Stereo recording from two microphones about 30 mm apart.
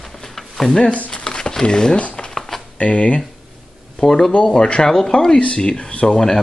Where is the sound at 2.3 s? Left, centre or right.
Centre.